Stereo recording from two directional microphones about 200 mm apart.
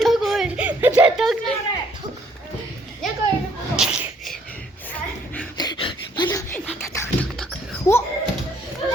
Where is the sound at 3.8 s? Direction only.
5° right (ahead or behind).